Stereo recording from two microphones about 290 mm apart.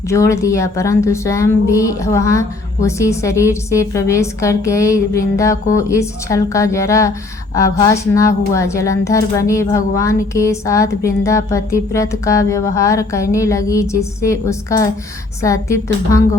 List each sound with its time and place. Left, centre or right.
0.1 s a woman's voice: centre